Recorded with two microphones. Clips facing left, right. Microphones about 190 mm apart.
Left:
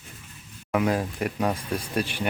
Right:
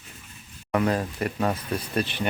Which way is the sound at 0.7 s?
10° left (ahead or behind).